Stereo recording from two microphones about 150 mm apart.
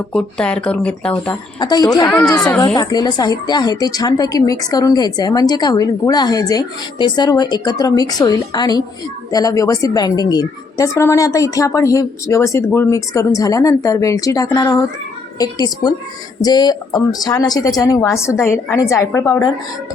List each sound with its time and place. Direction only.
0.1 s speech: 5° left (ahead or behind)
1.5 s a woman's voice: 30° left (ahead or behind)
2.0 s a child's voice: 5° left (ahead or behind)
2.7 s a woman's voice: 25° left (ahead or behind)